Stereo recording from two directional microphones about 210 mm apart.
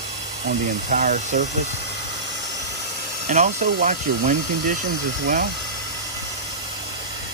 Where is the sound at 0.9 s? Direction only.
40° right (ahead or behind).